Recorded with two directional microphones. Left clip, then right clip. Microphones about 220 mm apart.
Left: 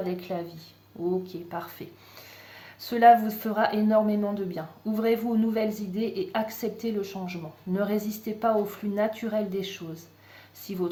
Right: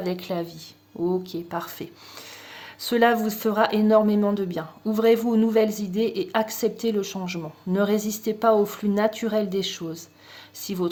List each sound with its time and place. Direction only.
0.0 s a woman's voice: 45° right (ahead or behind)